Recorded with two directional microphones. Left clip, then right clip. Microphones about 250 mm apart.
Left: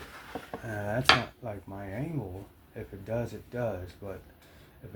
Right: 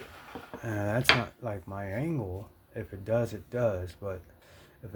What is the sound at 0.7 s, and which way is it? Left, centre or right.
Speech, right.